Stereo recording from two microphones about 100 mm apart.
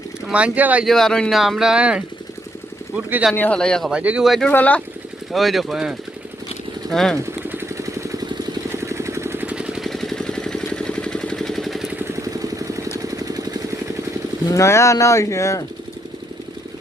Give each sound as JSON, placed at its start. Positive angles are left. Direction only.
{"t": 0.3, "sound": "speech", "side_deg": -10}
{"t": 0.9, "sound": "speech", "side_deg": 5}
{"t": 3.3, "sound": "speech", "side_deg": 15}
{"t": 3.8, "sound": "speech", "side_deg": -10}
{"t": 4.3, "sound": "speech", "side_deg": 5}
{"t": 5.3, "sound": "speech", "side_deg": 0}
{"t": 7.2, "sound": "vehicle", "side_deg": -25}
{"t": 11.9, "sound": "vehicle", "side_deg": -20}
{"t": 13.0, "sound": "jackhammer", "side_deg": -35}
{"t": 14.5, "sound": "speech", "side_deg": 30}